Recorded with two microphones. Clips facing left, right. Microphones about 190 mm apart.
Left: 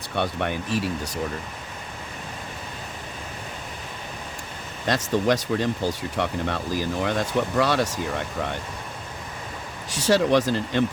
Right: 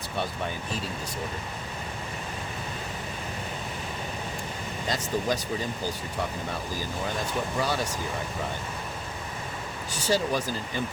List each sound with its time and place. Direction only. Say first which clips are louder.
0.2 s speech: left 6 dB; 70° left (ahead or behind)
4.9 s speech: left 7 dB; 75° left (ahead or behind)
9.9 s speech: left 7 dB; 80° left